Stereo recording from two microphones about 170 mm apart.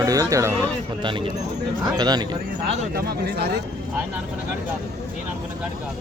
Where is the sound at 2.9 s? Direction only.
65° right (ahead or behind).